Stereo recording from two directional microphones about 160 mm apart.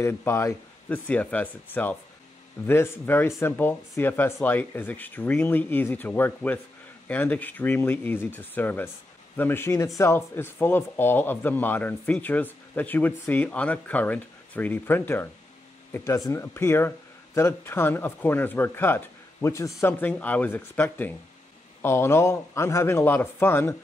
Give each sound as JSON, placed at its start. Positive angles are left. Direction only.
{"t": 0.0, "sound": "speech", "side_deg": 15}